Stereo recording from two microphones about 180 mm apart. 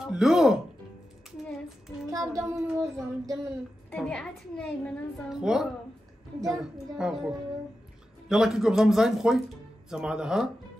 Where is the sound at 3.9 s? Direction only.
5° left (ahead or behind).